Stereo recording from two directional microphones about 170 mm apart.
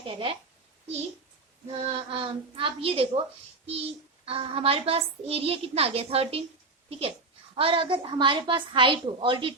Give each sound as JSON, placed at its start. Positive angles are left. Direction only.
{"t": 0.0, "sound": "a woman's voice", "side_deg": -30}
{"t": 1.6, "sound": "a child's voice", "side_deg": -35}
{"t": 7.5, "sound": "a woman's voice", "side_deg": -30}